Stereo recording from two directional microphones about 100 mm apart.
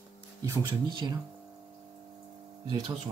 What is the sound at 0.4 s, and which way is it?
Speech, 40° right (ahead or behind).